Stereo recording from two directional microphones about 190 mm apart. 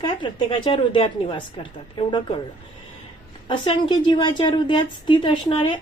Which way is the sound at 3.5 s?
25° left (ahead or behind).